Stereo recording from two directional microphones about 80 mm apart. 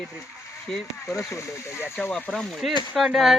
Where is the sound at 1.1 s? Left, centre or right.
Left.